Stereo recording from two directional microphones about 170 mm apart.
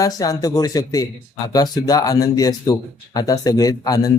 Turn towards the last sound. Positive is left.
turn(degrees=20)  # may be behind; listen again after turning